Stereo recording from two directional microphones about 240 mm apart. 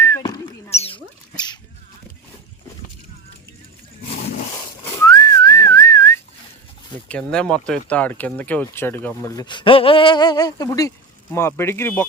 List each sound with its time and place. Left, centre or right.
0.0 s rodents: centre
0.7 s rodents: left
5.0 s whistling: centre
7.1 s speech: centre